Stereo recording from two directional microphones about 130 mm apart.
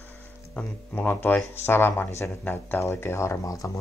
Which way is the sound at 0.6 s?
15° left (ahead or behind).